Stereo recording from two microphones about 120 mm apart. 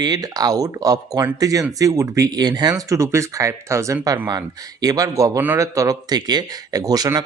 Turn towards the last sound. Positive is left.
turn(degrees=-30)  # may be behind; listen again after turning